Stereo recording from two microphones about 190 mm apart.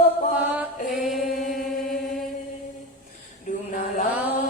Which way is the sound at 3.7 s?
45° left (ahead or behind).